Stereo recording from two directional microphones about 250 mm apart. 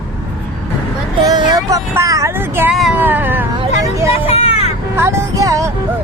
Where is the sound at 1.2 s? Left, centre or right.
Centre.